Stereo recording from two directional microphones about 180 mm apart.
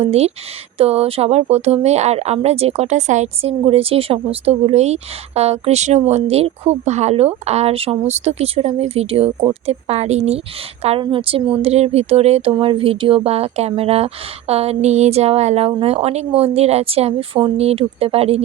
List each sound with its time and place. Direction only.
0.0 s speech: 35° right (ahead or behind)